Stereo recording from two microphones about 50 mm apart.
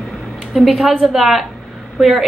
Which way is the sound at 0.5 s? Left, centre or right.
Centre.